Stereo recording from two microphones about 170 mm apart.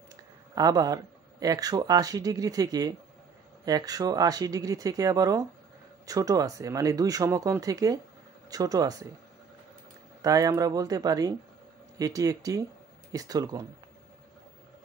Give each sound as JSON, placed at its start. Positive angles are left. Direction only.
{"t": 0.6, "sound": "speech", "side_deg": -20}
{"t": 10.2, "sound": "speech", "side_deg": -20}